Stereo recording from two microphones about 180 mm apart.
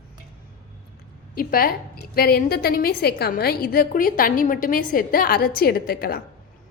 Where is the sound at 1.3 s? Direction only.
55° left (ahead or behind).